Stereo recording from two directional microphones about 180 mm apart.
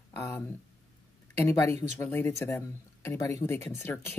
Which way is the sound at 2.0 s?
15° left (ahead or behind).